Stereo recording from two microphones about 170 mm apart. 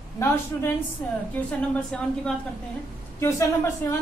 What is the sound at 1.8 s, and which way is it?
A woman's voice, 5° left (ahead or behind).